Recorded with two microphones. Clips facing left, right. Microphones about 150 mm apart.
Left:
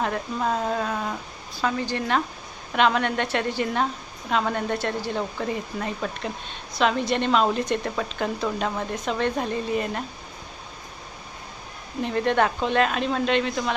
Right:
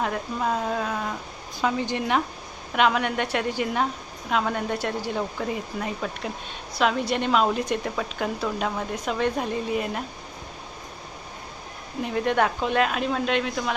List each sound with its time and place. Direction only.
0.0 s speech: 5° right (ahead or behind)
1.6 s speech: 20° right (ahead or behind)
12.0 s speech: 5° right (ahead or behind)